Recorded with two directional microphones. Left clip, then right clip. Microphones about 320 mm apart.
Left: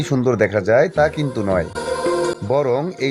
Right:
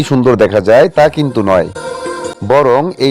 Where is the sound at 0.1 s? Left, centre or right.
Centre.